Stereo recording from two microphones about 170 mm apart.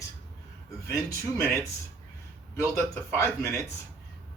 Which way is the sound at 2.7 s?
15° left (ahead or behind).